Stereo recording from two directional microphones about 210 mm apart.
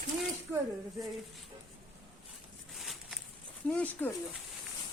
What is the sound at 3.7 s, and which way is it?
Speech, 10° left (ahead or behind).